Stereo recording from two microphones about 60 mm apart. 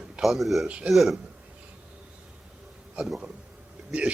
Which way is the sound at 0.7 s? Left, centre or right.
Centre.